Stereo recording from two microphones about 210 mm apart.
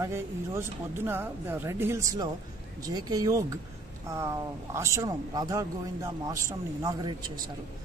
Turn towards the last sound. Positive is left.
turn(degrees=-20)  # may be behind; listen again after turning